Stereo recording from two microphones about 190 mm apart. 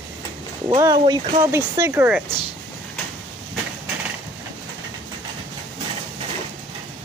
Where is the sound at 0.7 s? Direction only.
20° right (ahead or behind).